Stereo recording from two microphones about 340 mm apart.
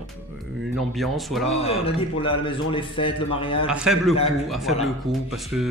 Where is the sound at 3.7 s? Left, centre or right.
Centre.